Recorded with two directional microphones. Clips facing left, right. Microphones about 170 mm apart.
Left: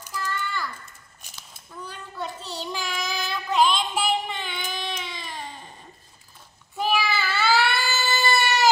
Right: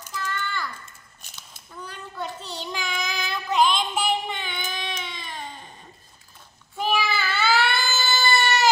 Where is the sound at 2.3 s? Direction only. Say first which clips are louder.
Left 1 dB; centre (ahead or behind).